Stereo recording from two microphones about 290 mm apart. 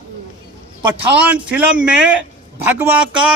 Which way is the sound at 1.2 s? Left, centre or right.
Centre.